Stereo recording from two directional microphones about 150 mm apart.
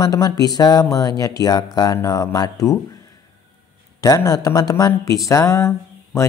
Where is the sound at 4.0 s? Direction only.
25° left (ahead or behind).